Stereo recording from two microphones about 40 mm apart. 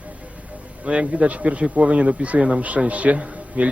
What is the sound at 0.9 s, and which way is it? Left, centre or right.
A man's voice, right.